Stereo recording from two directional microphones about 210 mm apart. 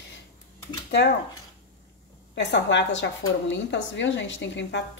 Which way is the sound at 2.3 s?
55° left (ahead or behind).